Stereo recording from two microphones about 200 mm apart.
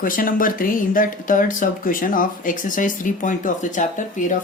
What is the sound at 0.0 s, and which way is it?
Speech, 45° left (ahead or behind).